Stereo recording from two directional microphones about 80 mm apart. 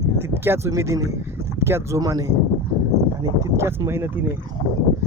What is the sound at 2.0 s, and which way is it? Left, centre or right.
Speech, right.